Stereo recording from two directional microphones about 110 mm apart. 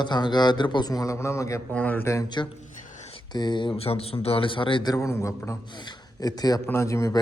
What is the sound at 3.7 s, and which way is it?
A man's voice, 65° left (ahead or behind).